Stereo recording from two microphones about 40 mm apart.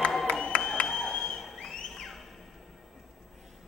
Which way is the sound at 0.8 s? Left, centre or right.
Centre.